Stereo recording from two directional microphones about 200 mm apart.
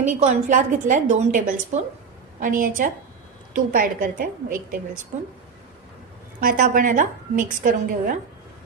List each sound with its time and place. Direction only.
0.2 s a woman's voice: 35° right (ahead or behind)
6.4 s a woman's voice: 45° right (ahead or behind)